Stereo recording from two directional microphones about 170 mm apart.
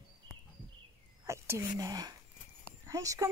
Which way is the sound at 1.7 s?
20° right (ahead or behind).